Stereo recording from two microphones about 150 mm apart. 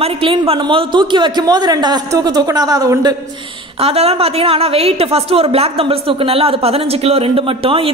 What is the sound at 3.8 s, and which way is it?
A woman's voice, 40° right (ahead or behind).